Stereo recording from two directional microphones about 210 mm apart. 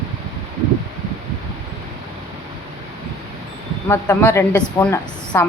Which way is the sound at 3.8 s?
10° left (ahead or behind).